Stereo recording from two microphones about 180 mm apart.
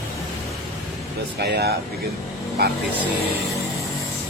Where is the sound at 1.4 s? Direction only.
65° right (ahead or behind).